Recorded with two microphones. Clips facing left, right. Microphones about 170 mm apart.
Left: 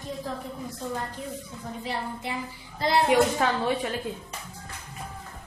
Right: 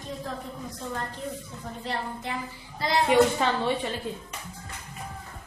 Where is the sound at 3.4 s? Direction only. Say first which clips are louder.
Left 1 dB; 5° left (ahead or behind).